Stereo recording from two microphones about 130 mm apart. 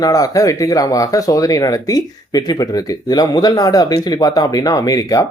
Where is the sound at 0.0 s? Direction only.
30° left (ahead or behind).